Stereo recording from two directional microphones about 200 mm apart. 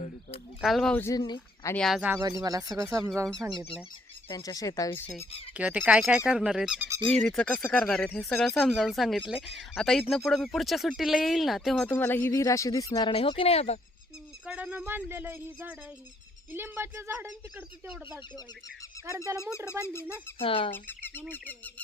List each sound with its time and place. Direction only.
0.6 s speech: centre (ahead or behind); by 1.7 s 20° left (ahead or behind)
1.7 s speech: centre (ahead or behind)
2.4 s speech: 20° right (ahead or behind)
4.3 s speech: 20° left (ahead or behind)
5.5 s speech: 10° right (ahead or behind); by 13.7 s 30° left (ahead or behind)
14.4 s speech: 5° right (ahead or behind)
19.4 s speech: 15° left (ahead or behind)
20.4 s speech: 25° left (ahead or behind)
20.7 s speech: 10° left (ahead or behind)